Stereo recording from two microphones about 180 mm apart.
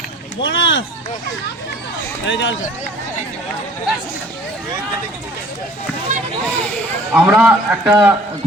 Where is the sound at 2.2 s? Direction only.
85° left.